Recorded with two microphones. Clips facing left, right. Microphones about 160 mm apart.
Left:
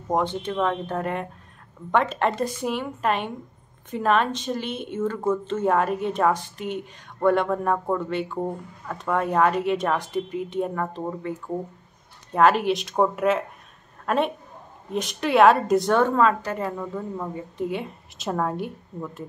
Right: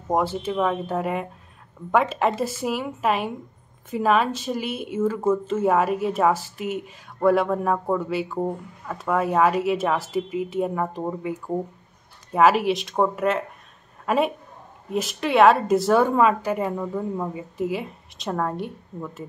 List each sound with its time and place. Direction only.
0.1 s a woman's voice: 5° right (ahead or behind)